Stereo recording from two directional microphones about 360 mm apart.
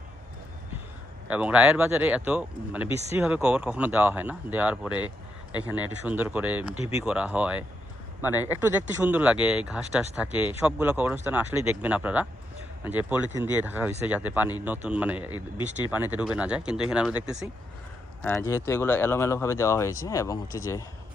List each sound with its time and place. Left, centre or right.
1.3 s speech: centre
6.7 s speech: centre
7.0 s speech: centre
15.3 s speech: centre
15.9 s speech: centre